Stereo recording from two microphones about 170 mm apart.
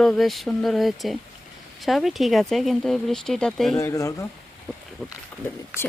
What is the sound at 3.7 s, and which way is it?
Speech, 15° left (ahead or behind).